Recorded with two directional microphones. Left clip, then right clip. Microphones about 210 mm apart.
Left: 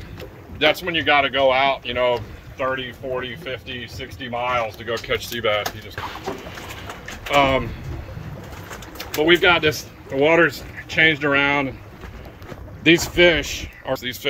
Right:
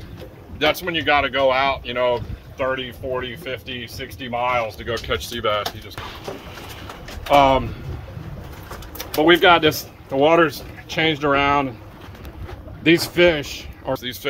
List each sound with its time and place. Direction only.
0.6 s speech: centre (ahead or behind)
7.3 s speech: 5° right (ahead or behind)
8.9 s speech: 15° right (ahead or behind)
10.1 s speech: 5° right (ahead or behind)
12.8 s speech: centre (ahead or behind)